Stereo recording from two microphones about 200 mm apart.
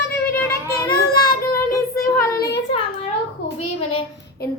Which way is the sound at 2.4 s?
55° left (ahead or behind).